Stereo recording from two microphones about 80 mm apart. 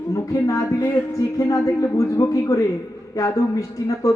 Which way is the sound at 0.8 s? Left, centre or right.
Left.